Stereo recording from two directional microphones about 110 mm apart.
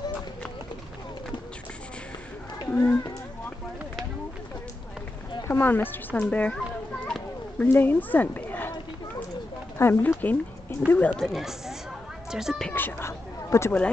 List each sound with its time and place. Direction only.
2.7 s speech: 15° left (ahead or behind)
5.5 s speech: 20° left (ahead or behind)
7.1 s a sound: 5° left (ahead or behind)
7.6 s speech: 20° left (ahead or behind)
9.8 s speech: 20° left (ahead or behind); by 12.6 s 5° right (ahead or behind)
12.6 s speech: 20° left (ahead or behind)